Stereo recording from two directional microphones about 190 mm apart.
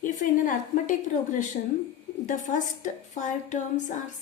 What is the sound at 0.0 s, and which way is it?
A woman's voice, 45° left (ahead or behind).